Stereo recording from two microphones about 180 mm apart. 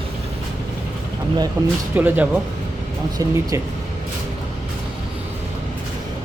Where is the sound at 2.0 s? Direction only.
10° right (ahead or behind).